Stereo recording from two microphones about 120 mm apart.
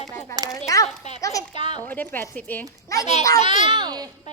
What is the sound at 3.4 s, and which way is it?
Speech, 75° left (ahead or behind).